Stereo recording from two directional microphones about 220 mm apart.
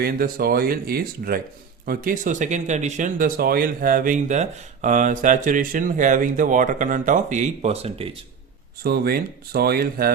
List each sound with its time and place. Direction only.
0.0 s speech: 45° right (ahead or behind); by 8.1 s 25° right (ahead or behind)
8.8 s speech: 45° right (ahead or behind)